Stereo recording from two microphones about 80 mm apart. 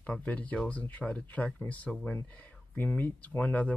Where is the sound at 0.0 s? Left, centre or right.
Centre.